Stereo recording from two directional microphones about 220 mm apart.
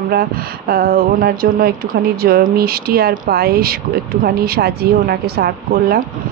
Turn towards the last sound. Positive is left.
turn(degrees=-45)  # may be behind; listen again after turning